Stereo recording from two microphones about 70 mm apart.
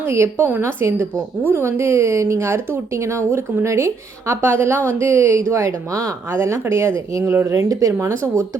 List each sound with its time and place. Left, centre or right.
0.0 s a woman's voice: right